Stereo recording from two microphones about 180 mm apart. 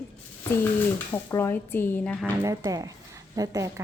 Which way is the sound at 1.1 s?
15° left (ahead or behind).